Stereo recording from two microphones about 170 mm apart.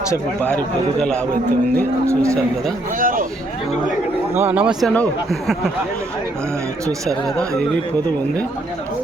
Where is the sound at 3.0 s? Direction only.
55° right (ahead or behind).